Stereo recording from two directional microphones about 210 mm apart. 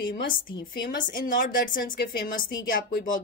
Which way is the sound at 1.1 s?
40° left (ahead or behind).